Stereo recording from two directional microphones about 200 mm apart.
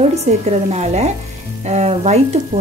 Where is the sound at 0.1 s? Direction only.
35° right (ahead or behind).